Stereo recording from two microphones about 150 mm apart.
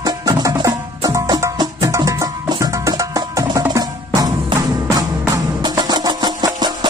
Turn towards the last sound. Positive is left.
turn(degrees=-30)  # may be behind; listen again after turning